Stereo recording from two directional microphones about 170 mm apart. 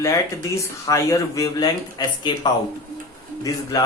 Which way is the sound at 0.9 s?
20° left (ahead or behind).